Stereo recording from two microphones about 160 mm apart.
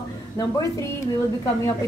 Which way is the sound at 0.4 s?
20° left (ahead or behind).